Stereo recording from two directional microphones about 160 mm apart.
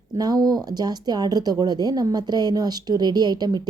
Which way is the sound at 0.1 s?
25° right (ahead or behind).